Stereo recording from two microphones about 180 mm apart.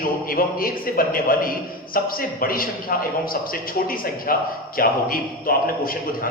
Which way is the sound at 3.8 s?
50° left (ahead or behind).